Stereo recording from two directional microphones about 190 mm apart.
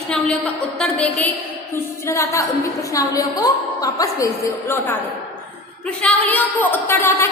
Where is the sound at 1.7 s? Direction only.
15° left (ahead or behind).